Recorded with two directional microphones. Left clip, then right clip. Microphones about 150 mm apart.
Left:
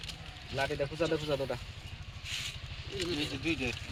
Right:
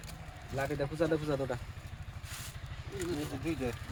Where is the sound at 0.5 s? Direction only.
75° right (ahead or behind).